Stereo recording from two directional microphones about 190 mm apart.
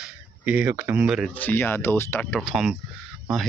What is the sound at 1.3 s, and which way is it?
Speech, 10° left (ahead or behind).